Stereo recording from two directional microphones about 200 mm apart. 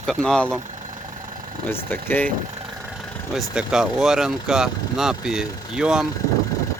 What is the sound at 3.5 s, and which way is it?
Speech, 5° right (ahead or behind).